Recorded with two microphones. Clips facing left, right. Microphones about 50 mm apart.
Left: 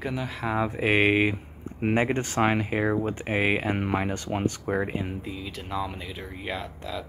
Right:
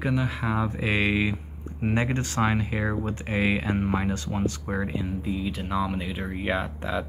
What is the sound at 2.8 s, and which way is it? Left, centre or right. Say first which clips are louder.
Speech: left 3 dB; centre.